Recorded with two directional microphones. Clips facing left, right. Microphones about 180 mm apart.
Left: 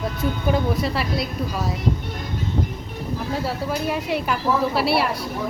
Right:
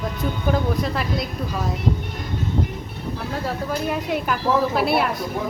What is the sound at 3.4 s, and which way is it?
Speech, 5° left (ahead or behind).